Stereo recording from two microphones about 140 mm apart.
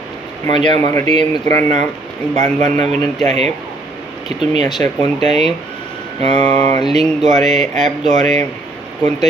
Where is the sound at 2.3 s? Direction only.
60° right (ahead or behind).